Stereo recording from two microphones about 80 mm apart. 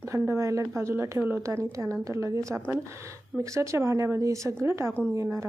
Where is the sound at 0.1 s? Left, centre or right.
Right.